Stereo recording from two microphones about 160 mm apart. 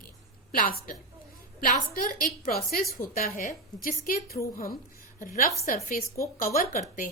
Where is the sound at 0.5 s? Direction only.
60° left (ahead or behind).